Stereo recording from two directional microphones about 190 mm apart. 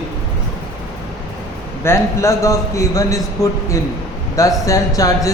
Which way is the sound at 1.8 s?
15° left (ahead or behind).